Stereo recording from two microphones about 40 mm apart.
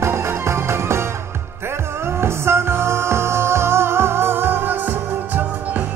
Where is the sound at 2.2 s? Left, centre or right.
Right.